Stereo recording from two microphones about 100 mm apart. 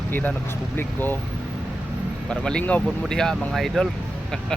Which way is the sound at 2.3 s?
10° left (ahead or behind).